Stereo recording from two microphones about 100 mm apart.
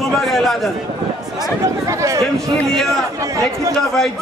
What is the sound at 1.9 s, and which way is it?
Speech, 30° right (ahead or behind).